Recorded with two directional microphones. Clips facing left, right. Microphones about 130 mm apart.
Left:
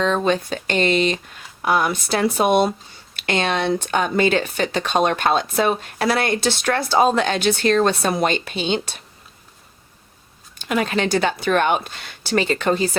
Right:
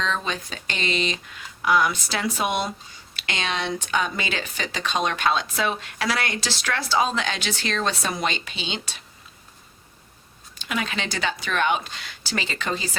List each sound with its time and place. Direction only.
0.0 s speech: 50° left (ahead or behind)
10.6 s speech: 45° left (ahead or behind)